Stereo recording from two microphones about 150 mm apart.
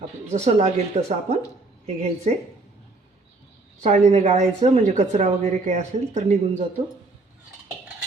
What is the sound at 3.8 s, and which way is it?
Speech, 45° right (ahead or behind).